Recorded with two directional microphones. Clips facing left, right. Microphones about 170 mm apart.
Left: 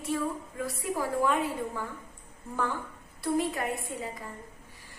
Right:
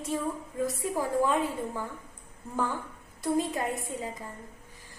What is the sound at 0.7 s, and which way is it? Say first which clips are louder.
Speech: left 1 dB; 20° right (ahead or behind).